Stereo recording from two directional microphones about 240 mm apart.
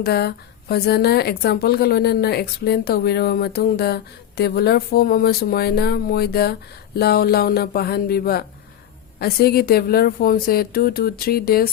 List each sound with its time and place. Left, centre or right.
0.0 s a woman's voice: left